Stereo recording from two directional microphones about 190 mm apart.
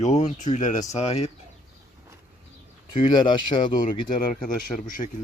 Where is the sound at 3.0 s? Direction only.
25° left (ahead or behind).